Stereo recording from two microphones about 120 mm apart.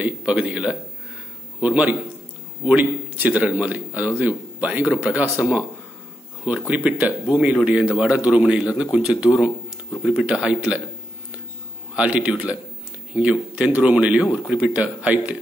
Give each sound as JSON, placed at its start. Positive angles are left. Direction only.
{"t": 0.0, "sound": "a man's voice", "side_deg": -10}
{"t": 6.7, "sound": "a man's voice", "side_deg": -10}
{"t": 11.9, "sound": "a man's voice", "side_deg": -10}